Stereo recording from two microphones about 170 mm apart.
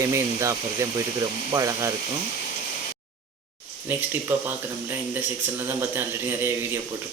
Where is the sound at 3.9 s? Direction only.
10° right (ahead or behind).